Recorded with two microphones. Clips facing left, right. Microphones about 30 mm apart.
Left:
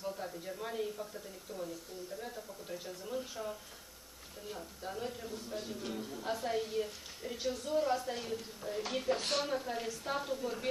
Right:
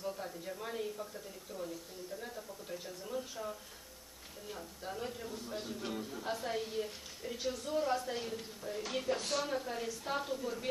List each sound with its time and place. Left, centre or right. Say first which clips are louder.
0.0 s a sound: even; centre
2.1 s a woman's voice: right 1 dB; centre
9.2 s a woman's voice: left 1 dB; left
9.5 s a woman's voice: left 1 dB; centre